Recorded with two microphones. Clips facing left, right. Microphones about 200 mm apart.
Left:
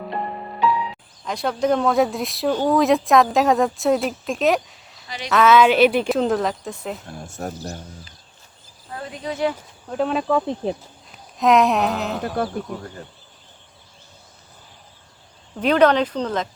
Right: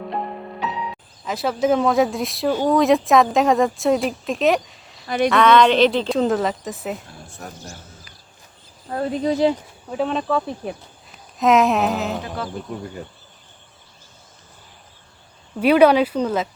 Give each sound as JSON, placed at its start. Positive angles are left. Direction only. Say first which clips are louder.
{"t": 0.1, "sound": "music", "louder": "even", "side_deg": 0}
{"t": 1.2, "sound": "speech", "louder": "right 1 dB", "side_deg": -5}
{"t": 5.0, "sound": "speech", "louder": "right 14 dB", "side_deg": -55}
{"t": 5.3, "sound": "speech", "louder": "left 1 dB", "side_deg": 5}
{"t": 7.3, "sound": "speech", "louder": "left 8 dB", "side_deg": 40}
{"t": 8.9, "sound": "speech", "louder": "right 9 dB", "side_deg": -40}
{"t": 9.9, "sound": "speech", "louder": "left 1 dB", "side_deg": 0}
{"t": 10.2, "sound": "speech", "louder": "left 2 dB", "side_deg": 15}
{"t": 11.3, "sound": "speech", "louder": "even", "side_deg": 0}
{"t": 15.6, "sound": "speech", "louder": "right 3 dB", "side_deg": -10}